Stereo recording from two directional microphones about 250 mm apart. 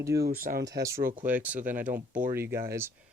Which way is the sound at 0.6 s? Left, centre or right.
Centre.